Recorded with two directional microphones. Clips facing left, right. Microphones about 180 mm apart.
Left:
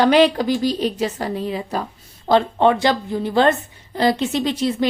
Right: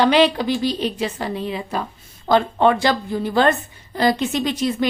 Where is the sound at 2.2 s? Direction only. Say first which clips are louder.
Left 1 dB; 25° left (ahead or behind).